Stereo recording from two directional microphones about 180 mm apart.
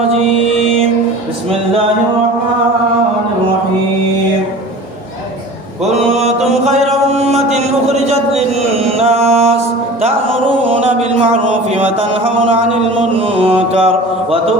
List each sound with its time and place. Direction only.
6.7 s a sound: 35° right (ahead or behind)
8.8 s mantra: 35° right (ahead or behind)
13.1 s mantra: 30° right (ahead or behind)